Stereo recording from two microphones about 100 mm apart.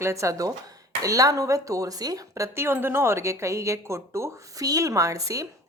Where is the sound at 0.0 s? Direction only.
30° right (ahead or behind).